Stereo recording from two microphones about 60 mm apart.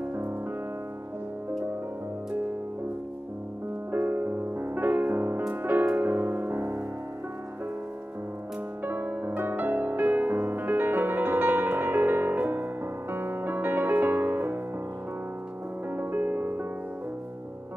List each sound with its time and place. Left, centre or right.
3.9 s music: right
8.8 s music: right
15.9 s music: right